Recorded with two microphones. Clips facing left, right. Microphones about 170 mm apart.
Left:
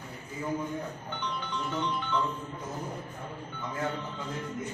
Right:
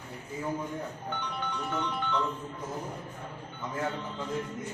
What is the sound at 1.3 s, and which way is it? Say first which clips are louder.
Music: left 1 dB; 60° right (ahead or behind).